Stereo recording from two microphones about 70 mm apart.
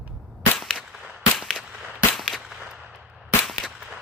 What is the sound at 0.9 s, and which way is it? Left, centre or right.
Firecracker, centre.